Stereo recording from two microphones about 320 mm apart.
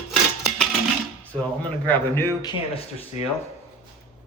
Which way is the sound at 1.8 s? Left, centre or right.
Centre.